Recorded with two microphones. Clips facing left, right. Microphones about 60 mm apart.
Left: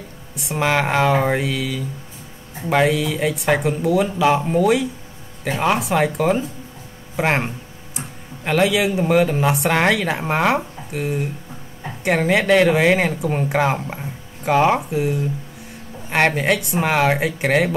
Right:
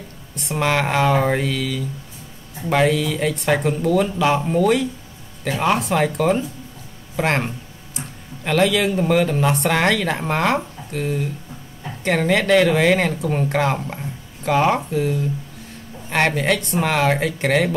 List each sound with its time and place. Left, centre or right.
0.3 s speech: centre